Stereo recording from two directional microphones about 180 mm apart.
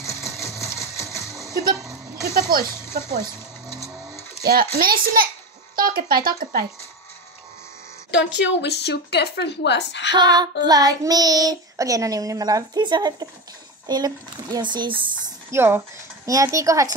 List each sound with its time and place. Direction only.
0.0 s sewing machine: 15° left (ahead or behind)
2.2 s speech: 55° right (ahead or behind)
4.4 s speech: 60° right (ahead or behind)
8.4 s a woman's voice: 75° left (ahead or behind)
10.1 s a child's voice: 25° right (ahead or behind)
15.5 s speech: 15° right (ahead or behind)